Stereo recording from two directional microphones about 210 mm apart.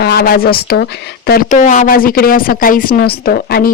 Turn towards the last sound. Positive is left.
turn(degrees=45)  # may be behind; listen again after turning